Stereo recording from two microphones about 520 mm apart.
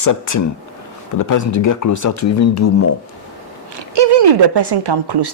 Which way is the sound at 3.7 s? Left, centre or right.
Right.